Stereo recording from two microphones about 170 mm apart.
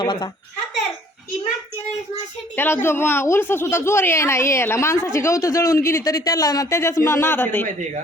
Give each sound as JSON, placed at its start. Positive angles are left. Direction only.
{"t": 0.0, "sound": "a child's voice", "side_deg": 25}
{"t": 2.6, "sound": "a man's voice", "side_deg": 15}